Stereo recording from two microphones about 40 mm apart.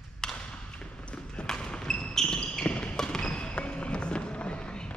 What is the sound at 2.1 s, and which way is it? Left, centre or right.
Basketball bounce, centre.